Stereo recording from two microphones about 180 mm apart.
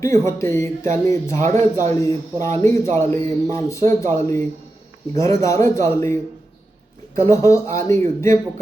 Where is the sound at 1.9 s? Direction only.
15° left (ahead or behind).